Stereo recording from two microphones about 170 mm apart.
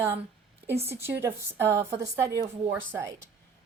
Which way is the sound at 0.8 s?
15° right (ahead or behind).